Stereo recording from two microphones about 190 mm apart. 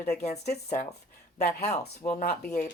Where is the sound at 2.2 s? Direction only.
45° left (ahead or behind).